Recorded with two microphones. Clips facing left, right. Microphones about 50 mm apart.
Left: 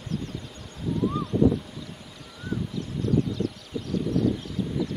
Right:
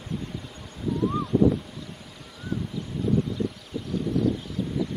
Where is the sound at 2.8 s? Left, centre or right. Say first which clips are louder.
Even; centre.